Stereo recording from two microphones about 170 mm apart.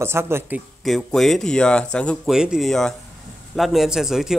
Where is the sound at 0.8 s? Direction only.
5° left (ahead or behind).